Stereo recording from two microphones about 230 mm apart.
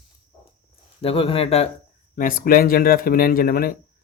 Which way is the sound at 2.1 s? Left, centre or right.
Left.